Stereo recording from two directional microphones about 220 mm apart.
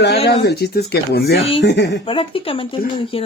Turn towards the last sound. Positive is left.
turn(degrees=25)  # may be behind; listen again after turning